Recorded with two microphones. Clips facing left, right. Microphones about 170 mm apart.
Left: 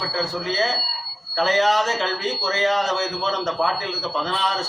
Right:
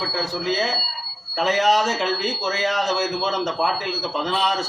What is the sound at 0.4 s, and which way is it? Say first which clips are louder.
Speech: even; 15° right (ahead or behind).